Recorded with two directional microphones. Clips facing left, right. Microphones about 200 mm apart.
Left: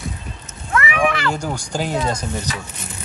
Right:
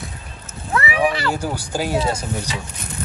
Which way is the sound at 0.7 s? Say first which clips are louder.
Even; 35° right (ahead or behind).